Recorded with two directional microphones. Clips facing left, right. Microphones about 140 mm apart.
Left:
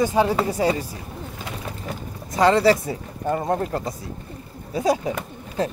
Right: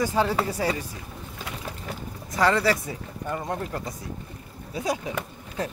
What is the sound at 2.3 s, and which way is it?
Speech, 25° left (ahead or behind).